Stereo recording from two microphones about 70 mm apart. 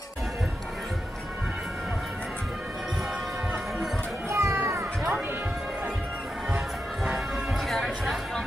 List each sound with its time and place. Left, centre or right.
4.3 s music: right
7.6 s music: centre